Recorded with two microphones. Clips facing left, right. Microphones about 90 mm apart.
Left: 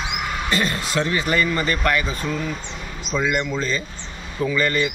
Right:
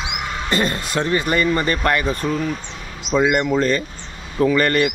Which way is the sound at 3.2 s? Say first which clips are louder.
Right 6 dB; 50° right (ahead or behind).